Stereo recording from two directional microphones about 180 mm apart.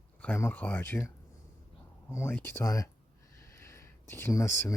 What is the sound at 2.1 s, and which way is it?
Speech, 15° left (ahead or behind).